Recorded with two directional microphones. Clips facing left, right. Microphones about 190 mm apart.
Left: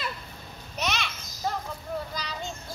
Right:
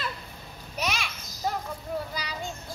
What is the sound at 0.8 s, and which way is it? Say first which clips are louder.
Children playing: even; 10° right (ahead or behind).